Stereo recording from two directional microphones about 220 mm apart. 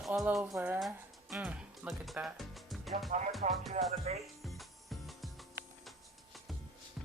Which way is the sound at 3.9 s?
30° right (ahead or behind).